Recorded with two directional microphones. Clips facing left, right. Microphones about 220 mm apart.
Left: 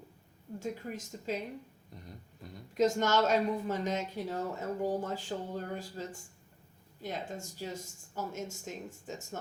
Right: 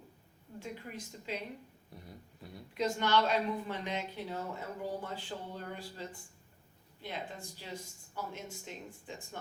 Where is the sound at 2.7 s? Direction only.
45° left (ahead or behind).